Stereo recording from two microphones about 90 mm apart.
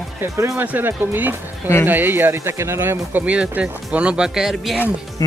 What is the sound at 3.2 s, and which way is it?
Speech, 15° right (ahead or behind).